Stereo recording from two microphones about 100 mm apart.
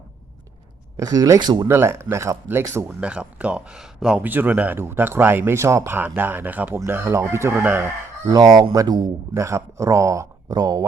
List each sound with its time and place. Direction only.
0.9 s speech: 35° right (ahead or behind)
1.4 s speech: 50° right (ahead or behind)
1.6 s speech: 25° right (ahead or behind)
3.0 s speech: 10° right (ahead or behind)
8.3 s speech: 40° right (ahead or behind)